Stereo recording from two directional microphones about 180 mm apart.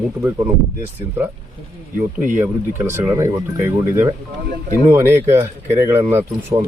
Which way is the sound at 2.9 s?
15° right (ahead or behind).